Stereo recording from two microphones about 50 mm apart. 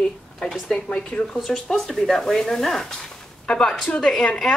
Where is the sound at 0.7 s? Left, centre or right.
Left.